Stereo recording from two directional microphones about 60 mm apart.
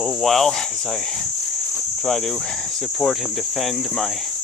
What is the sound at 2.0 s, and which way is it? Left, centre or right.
Speech, centre.